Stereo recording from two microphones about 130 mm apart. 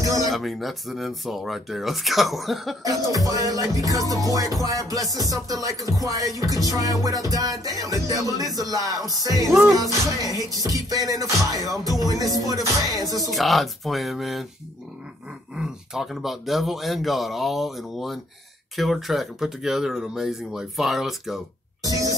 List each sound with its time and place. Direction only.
0.0 s music: 25° right (ahead or behind)
0.3 s speech: centre (ahead or behind)
2.8 s music: 25° right (ahead or behind)
13.3 s speech: centre (ahead or behind)
15.5 s speech: 5° right (ahead or behind)
21.8 s a sound: 25° right (ahead or behind)